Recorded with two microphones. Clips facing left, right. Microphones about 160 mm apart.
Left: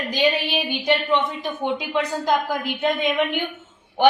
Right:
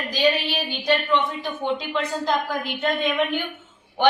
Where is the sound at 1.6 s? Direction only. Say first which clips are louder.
Left 2 dB; 15° left (ahead or behind).